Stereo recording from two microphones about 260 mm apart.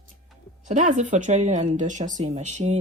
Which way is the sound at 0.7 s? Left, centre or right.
Right.